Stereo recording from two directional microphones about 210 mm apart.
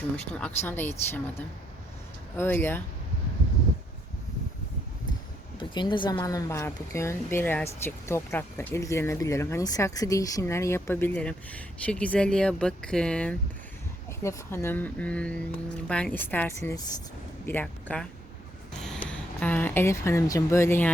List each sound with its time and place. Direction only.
0.3 s speech: 10° left (ahead or behind)
5.5 s speech: 20° left (ahead or behind)